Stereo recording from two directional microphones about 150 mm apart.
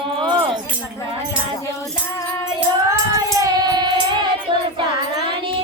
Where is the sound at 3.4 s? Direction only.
25° right (ahead or behind).